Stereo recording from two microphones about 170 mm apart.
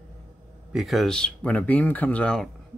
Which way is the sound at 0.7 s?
Centre (ahead or behind).